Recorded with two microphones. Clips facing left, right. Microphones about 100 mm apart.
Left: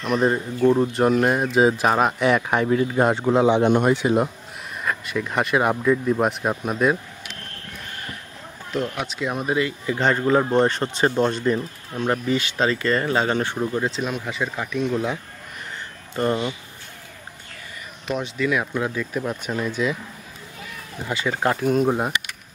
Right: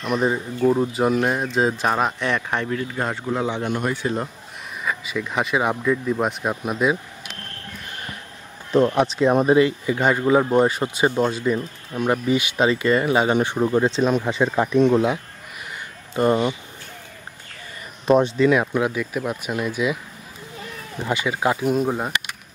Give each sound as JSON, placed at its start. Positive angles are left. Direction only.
{"t": 0.0, "sound": "speech", "side_deg": 0}
{"t": 2.9, "sound": "a man's voice", "side_deg": 20}
{"t": 4.8, "sound": "speech", "side_deg": 0}
{"t": 8.7, "sound": "speech", "side_deg": -35}
{"t": 9.8, "sound": "speech", "side_deg": -10}
{"t": 16.2, "sound": "speech", "side_deg": -20}
{"t": 18.0, "sound": "speech", "side_deg": -35}
{"t": 21.1, "sound": "speech", "side_deg": -10}
{"t": 21.8, "sound": "speech", "side_deg": 5}